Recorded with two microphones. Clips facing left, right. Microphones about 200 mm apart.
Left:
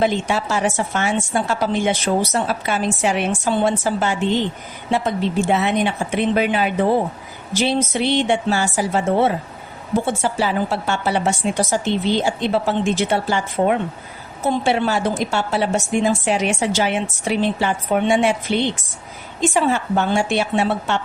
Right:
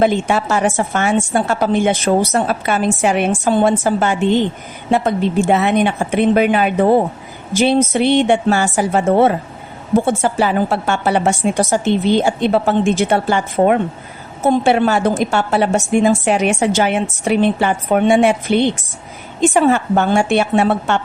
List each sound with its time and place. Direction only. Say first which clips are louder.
0.0 s a woman's voice: right 4 dB; 55° right (ahead or behind)